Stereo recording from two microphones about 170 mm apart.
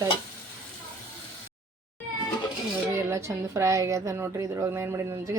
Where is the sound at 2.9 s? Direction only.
15° right (ahead or behind).